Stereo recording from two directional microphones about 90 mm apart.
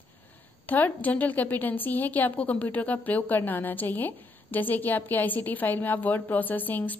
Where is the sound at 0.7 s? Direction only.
20° left (ahead or behind).